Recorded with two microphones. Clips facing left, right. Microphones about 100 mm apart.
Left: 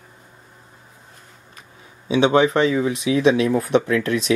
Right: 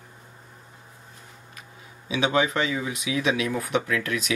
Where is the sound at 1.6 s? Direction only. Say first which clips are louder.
Left 1 dB; 35° left (ahead or behind).